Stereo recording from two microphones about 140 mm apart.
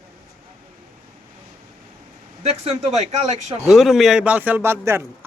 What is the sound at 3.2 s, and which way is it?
Speech, 55° right (ahead or behind).